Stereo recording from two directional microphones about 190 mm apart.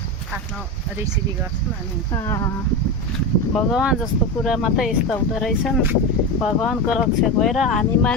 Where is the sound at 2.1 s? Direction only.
15° left (ahead or behind).